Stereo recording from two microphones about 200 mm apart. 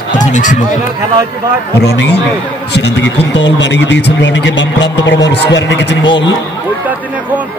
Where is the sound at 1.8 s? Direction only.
55° left (ahead or behind).